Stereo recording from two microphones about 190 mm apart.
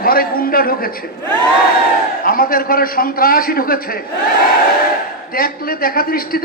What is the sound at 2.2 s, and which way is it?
A man's voice, 50° left (ahead or behind).